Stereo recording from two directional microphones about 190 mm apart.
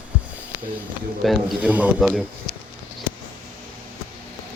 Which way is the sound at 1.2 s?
5° right (ahead or behind).